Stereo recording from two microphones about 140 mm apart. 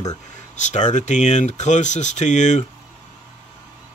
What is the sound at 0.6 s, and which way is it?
Speech, 60° left (ahead or behind).